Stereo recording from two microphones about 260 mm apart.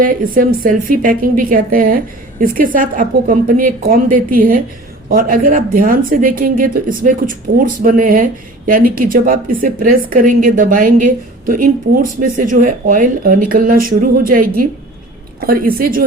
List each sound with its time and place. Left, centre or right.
0.0 s speech: right
11.9 s speech: right